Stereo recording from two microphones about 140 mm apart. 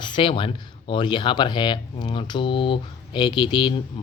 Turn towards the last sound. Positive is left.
turn(degrees=30)  # may be behind; listen again after turning